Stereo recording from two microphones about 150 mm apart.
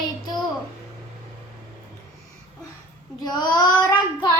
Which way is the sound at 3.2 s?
25° left (ahead or behind).